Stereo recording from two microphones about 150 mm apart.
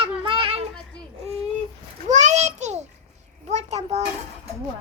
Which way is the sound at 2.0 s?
50° right (ahead or behind).